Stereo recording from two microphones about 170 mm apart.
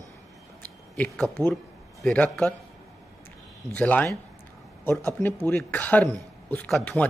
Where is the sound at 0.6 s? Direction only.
10° left (ahead or behind).